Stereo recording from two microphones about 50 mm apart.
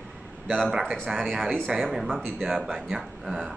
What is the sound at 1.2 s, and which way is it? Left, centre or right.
Speech, centre.